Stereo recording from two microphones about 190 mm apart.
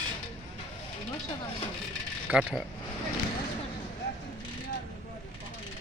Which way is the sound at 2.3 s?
5° right (ahead or behind).